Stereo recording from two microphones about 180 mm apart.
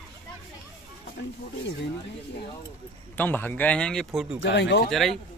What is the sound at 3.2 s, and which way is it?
Speech, 10° left (ahead or behind).